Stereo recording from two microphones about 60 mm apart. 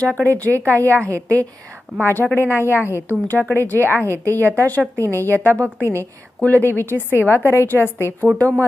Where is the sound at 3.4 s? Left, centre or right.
Right.